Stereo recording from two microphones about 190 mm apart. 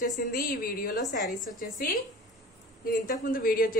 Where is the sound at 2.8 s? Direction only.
50° left (ahead or behind).